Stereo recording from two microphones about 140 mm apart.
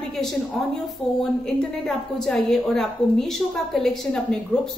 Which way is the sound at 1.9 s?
5° left (ahead or behind).